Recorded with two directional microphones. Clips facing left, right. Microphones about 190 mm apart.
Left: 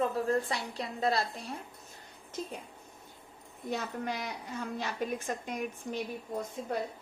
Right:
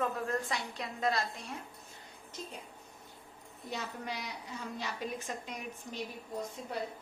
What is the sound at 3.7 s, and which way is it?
Speech, 50° left (ahead or behind).